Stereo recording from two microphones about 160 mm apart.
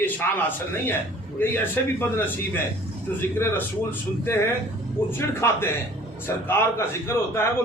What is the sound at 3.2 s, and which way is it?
A man's voice, 15° left (ahead or behind).